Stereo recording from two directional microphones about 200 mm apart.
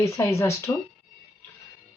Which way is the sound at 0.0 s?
15° left (ahead or behind).